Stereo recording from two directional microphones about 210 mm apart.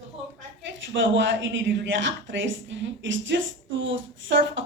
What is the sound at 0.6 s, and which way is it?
A woman's voice, 60° right (ahead or behind).